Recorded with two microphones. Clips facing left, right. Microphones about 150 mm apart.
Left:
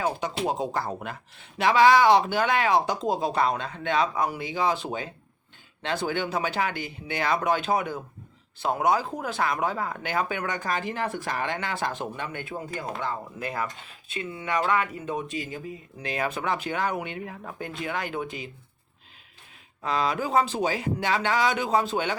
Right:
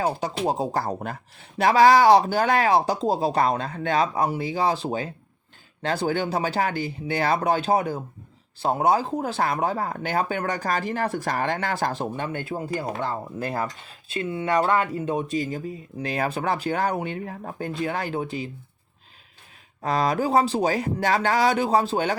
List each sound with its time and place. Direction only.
0.0 s speech: 35° right (ahead or behind)
19.8 s speech: 40° right (ahead or behind)